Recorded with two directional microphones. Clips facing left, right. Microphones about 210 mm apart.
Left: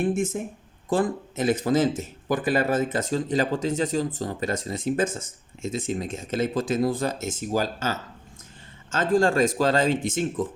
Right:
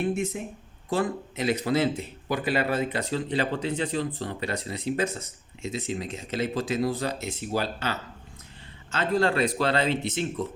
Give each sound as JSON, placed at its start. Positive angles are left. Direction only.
{"t": 0.0, "sound": "a man's voice", "side_deg": 50}